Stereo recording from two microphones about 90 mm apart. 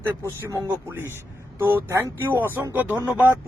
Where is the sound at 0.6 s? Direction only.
25° right (ahead or behind).